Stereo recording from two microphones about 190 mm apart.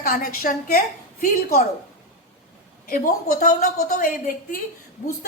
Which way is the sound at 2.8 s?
50° left (ahead or behind).